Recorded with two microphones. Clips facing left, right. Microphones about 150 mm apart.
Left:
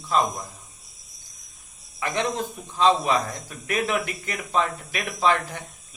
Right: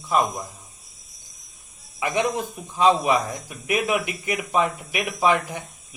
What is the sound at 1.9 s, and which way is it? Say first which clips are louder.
A man's voice: right 3 dB; 15° right (ahead or behind).